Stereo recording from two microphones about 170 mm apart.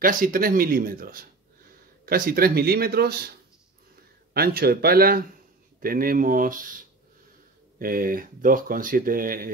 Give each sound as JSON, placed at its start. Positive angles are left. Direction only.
{"t": 0.0, "sound": "speech", "side_deg": -55}
{"t": 4.3, "sound": "speech", "side_deg": -65}
{"t": 7.8, "sound": "speech", "side_deg": -55}